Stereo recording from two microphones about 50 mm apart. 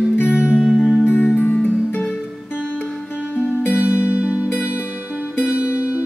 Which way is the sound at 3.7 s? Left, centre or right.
Right.